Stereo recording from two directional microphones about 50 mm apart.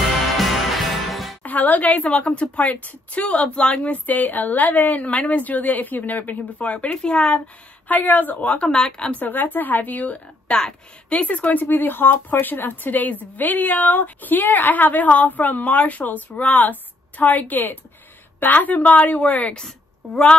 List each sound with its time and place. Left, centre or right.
0.3 s music: centre
1.4 s a woman's voice: left
7.9 s a woman's voice: left
8.6 s speech: centre
9.2 s a woman's voice: left